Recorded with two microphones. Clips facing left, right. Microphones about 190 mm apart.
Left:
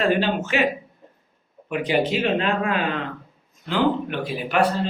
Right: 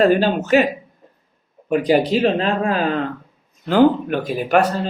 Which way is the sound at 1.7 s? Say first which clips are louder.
Right 6 dB; 40° right (ahead or behind).